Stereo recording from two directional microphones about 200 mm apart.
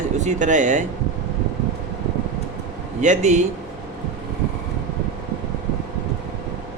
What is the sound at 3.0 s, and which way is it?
Speech, 35° right (ahead or behind).